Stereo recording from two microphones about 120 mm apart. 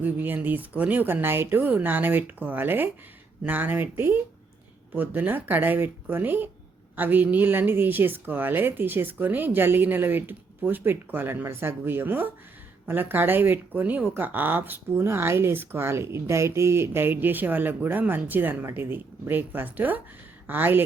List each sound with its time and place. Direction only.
0.0 s speech: 15° right (ahead or behind)